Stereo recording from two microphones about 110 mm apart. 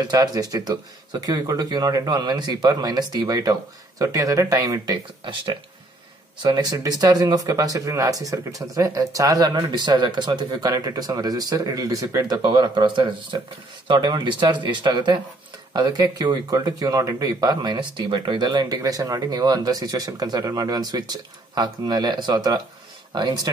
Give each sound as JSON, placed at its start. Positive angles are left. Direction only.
{"t": 0.0, "sound": "speech", "side_deg": -40}